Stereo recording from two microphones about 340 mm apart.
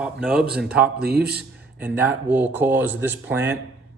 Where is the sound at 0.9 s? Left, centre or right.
Right.